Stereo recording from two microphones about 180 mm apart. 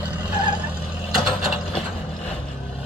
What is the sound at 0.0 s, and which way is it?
Vehicle, 10° right (ahead or behind).